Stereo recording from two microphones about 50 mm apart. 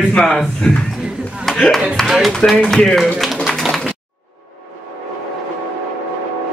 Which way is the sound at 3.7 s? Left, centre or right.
Centre.